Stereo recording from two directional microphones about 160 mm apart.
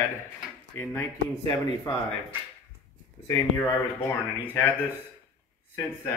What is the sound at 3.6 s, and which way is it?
Speech, 20° left (ahead or behind).